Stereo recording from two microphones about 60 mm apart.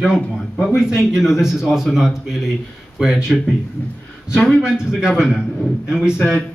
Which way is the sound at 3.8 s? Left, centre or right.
Left.